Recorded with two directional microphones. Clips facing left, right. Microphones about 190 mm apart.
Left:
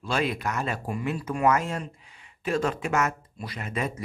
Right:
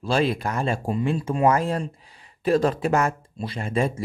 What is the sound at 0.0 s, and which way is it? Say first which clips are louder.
Speech: right 5 dB; 30° right (ahead or behind).